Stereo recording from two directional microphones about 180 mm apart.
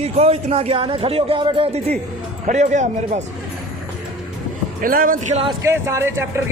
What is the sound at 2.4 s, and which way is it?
Speech, 45° right (ahead or behind).